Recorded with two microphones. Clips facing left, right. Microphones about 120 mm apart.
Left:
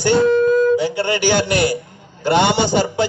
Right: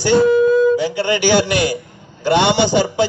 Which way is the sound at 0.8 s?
45° left (ahead or behind).